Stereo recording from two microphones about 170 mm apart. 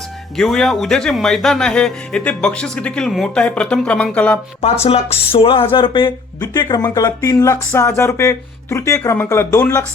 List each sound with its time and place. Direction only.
0.3 s speech: centre (ahead or behind)
4.6 s speech: 35° left (ahead or behind); by 9.8 s 20° left (ahead or behind)